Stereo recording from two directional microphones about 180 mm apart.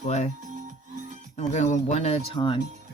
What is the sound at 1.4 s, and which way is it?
Speech, 40° left (ahead or behind).